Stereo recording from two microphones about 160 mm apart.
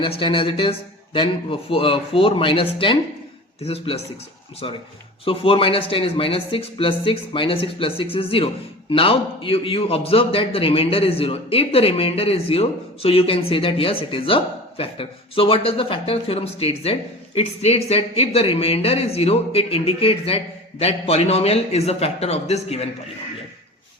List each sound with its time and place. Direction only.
0.0 s a man's voice: 35° left (ahead or behind)